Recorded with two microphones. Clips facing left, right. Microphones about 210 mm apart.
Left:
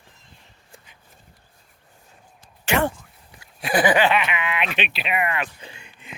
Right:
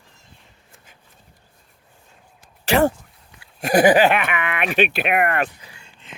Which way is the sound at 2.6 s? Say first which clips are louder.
Right 5 dB; 40° right (ahead or behind).